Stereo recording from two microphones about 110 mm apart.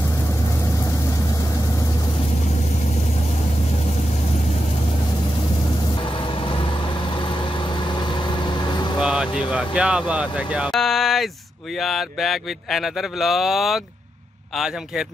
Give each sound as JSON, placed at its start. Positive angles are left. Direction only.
{"t": 9.0, "sound": "vehicle", "side_deg": -10}
{"t": 9.5, "sound": "speech", "side_deg": -10}
{"t": 10.7, "sound": "a sound", "side_deg": 0}
{"t": 11.8, "sound": "speech", "side_deg": 0}